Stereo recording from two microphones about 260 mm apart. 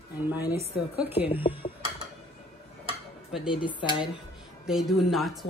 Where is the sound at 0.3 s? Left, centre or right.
Centre.